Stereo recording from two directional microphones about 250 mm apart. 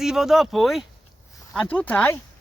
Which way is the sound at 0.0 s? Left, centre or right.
Centre.